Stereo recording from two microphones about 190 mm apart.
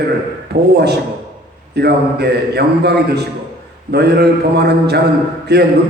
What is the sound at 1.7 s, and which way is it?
A man's voice, 60° right (ahead or behind).